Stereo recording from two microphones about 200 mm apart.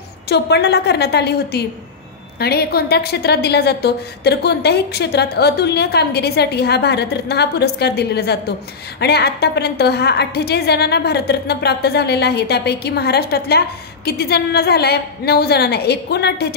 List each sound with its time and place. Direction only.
0.3 s a woman's voice: 55° left (ahead or behind)